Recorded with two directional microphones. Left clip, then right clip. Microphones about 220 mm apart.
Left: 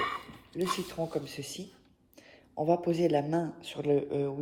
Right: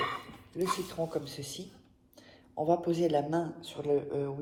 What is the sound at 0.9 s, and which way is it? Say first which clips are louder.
Speech: even; 45° left (ahead or behind).